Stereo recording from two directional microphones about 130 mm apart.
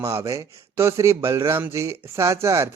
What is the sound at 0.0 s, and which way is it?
Speech, 20° right (ahead or behind).